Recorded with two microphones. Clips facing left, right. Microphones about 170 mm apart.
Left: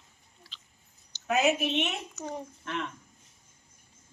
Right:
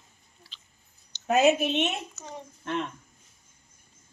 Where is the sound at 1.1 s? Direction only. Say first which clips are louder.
Right 2 dB; 10° left (ahead or behind).